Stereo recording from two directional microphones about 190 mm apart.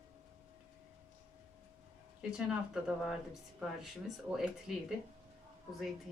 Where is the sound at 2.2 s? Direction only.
5° right (ahead or behind).